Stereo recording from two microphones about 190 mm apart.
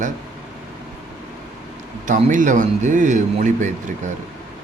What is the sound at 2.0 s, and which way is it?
A man's voice, 45° right (ahead or behind).